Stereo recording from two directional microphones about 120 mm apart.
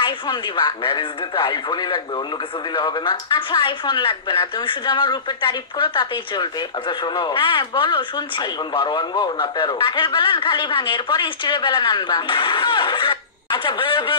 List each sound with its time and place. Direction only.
0.0 s speech: 40° left (ahead or behind)